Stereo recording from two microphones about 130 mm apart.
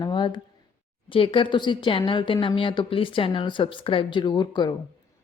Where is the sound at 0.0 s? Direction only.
35° left (ahead or behind).